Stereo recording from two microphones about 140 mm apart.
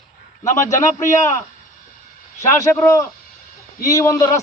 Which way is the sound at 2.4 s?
20° left (ahead or behind).